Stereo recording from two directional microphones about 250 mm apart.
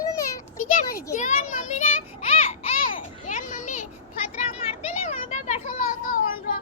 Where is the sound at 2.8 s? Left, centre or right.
Left.